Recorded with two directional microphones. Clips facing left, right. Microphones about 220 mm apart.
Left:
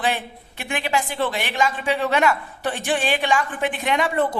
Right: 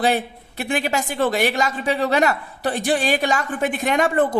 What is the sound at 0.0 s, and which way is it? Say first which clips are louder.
A woman's voice: right 5 dB; 40° right (ahead or behind).